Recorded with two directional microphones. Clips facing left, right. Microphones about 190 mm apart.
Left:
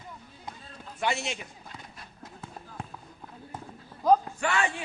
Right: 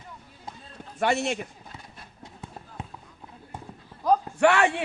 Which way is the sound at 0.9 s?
55° right (ahead or behind).